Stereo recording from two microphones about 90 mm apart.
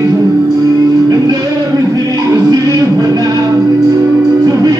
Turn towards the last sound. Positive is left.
turn(degrees=-40)  # may be behind; listen again after turning